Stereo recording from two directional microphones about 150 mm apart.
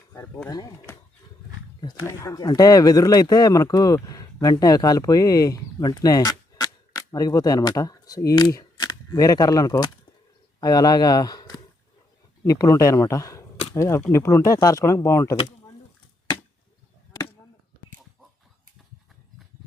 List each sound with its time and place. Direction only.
0.4 s speech: 20° left (ahead or behind)